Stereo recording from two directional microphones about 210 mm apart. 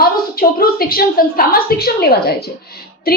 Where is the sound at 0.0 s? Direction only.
45° left (ahead or behind).